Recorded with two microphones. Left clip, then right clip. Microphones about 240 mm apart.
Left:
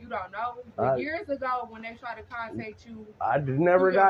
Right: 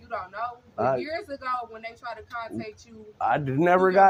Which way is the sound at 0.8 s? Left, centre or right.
Right.